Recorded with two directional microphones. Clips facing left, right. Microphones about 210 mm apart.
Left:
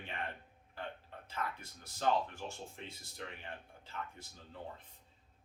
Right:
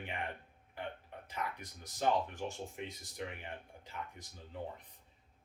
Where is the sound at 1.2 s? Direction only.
15° right (ahead or behind).